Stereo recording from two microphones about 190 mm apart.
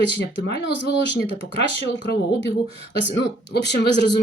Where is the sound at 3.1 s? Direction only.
65° left (ahead or behind).